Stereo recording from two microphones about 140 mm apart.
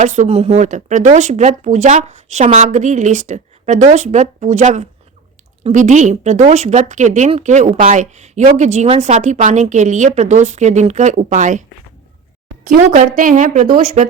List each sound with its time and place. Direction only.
0.0 s speech: 55° right (ahead or behind)
13.1 s speech: 65° right (ahead or behind)